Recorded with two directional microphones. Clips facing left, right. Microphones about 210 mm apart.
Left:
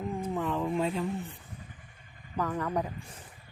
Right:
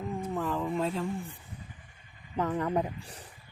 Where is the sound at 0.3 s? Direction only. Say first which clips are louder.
Left 1 dB; centre (ahead or behind).